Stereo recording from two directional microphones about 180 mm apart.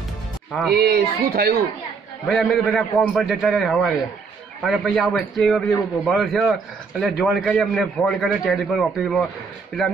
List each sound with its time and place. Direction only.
0.5 s speech: centre (ahead or behind)
0.7 s speech: 60° right (ahead or behind)
2.2 s a man's voice: centre (ahead or behind)